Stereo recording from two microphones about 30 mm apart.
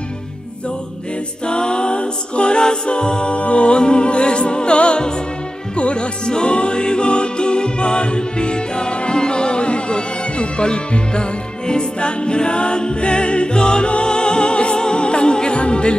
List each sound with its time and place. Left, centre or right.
1.4 s music: left
3.3 s music: left